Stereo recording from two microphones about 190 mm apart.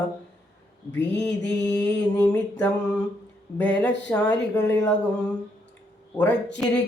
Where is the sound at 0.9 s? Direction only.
65° left (ahead or behind).